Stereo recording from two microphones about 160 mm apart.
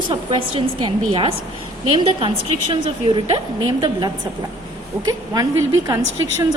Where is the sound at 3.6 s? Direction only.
30° right (ahead or behind).